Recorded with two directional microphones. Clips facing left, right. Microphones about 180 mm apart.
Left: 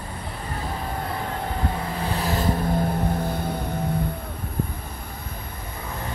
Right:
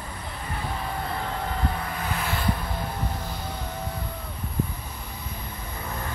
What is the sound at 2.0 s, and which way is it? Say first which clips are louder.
Vehicle: left 6 dB; 35° left (ahead or behind).